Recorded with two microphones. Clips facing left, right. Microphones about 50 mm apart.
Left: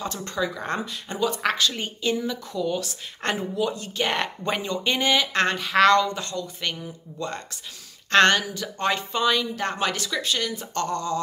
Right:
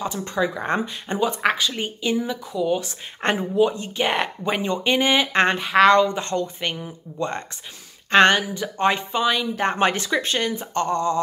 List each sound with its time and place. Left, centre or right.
0.0 s speech: centre
1.4 s speech: centre
8.1 s speech: centre
9.6 s speech: right
10.6 s speech: right